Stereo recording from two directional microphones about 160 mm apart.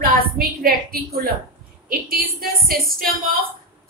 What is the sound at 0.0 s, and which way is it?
A woman's voice, 65° right (ahead or behind).